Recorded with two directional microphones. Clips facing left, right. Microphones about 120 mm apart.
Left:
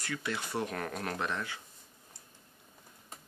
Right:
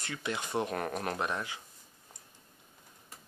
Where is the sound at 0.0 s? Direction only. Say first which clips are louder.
Even; 20° right (ahead or behind).